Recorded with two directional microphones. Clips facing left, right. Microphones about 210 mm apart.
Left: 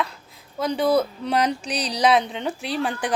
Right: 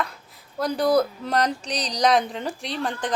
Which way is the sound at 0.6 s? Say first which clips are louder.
Even; centre (ahead or behind).